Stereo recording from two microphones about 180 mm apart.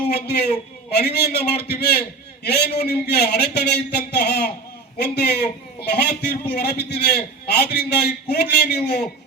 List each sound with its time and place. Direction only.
0.3 s a man's voice: 65° left (ahead or behind)